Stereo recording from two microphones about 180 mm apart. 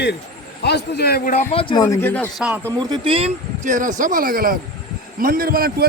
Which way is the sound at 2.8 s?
25° right (ahead or behind).